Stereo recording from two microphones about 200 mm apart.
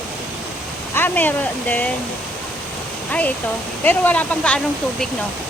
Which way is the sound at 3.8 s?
10° left (ahead or behind).